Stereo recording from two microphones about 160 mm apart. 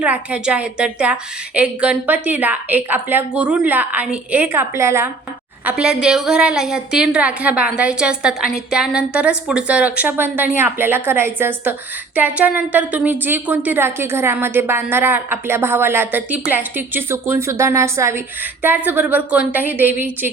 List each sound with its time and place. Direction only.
0.0 s a woman's voice: 10° right (ahead or behind)